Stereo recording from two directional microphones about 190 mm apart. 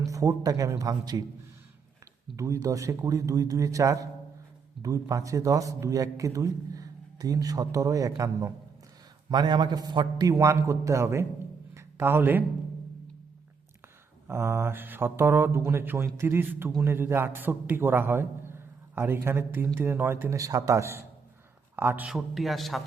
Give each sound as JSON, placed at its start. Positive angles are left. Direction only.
{"t": 0.0, "sound": "speech", "side_deg": -15}
{"t": 2.3, "sound": "a man's voice", "side_deg": -15}
{"t": 11.7, "sound": "a sound", "side_deg": -15}
{"t": 14.3, "sound": "a man's voice", "side_deg": -15}